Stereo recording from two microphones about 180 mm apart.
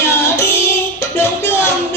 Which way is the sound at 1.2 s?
15° left (ahead or behind).